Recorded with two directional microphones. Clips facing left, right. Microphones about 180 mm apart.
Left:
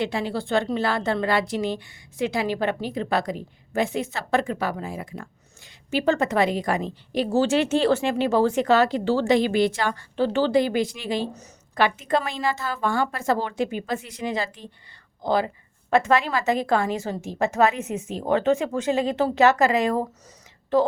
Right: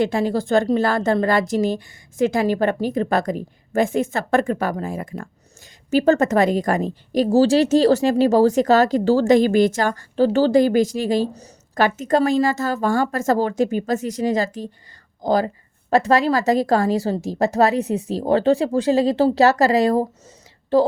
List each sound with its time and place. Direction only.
0.0 s a woman's voice: 45° right (ahead or behind)